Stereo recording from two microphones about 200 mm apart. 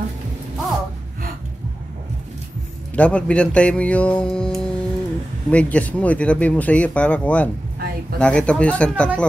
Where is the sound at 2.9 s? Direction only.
5° left (ahead or behind).